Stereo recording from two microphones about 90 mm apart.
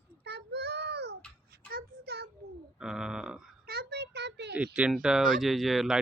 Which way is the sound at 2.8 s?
10° right (ahead or behind).